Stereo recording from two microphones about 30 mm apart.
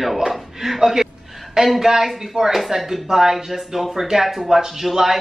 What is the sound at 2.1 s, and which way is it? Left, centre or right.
Speech, centre.